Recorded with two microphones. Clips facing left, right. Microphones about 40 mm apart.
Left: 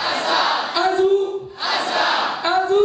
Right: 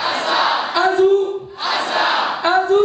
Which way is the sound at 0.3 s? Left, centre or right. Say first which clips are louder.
Right 2 dB; centre.